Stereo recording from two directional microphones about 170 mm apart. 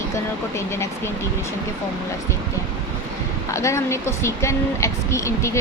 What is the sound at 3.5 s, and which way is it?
A woman's voice, 15° left (ahead or behind).